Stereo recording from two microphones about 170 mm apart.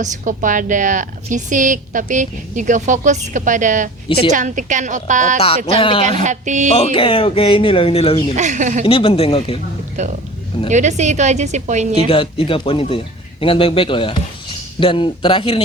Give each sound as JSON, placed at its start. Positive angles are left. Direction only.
{"t": 0.0, "sound": "a woman's voice", "side_deg": -50}
{"t": 5.4, "sound": "speech", "side_deg": 30}
{"t": 6.2, "sound": "a woman's voice", "side_deg": -45}
{"t": 6.7, "sound": "speech", "side_deg": 35}
{"t": 8.4, "sound": "a woman's voice", "side_deg": -45}
{"t": 8.8, "sound": "speech", "side_deg": 30}
{"t": 10.0, "sound": "a woman's voice", "side_deg": -45}
{"t": 12.0, "sound": "speech", "side_deg": 30}